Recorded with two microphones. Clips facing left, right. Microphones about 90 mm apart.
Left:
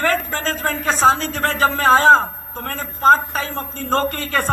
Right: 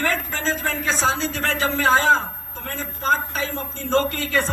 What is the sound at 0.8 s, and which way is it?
A man's voice, 45° left (ahead or behind).